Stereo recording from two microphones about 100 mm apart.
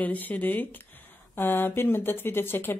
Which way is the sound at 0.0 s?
15° left (ahead or behind).